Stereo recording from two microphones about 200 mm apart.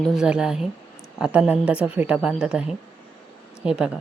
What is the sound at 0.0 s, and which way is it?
A woman's voice, centre (ahead or behind).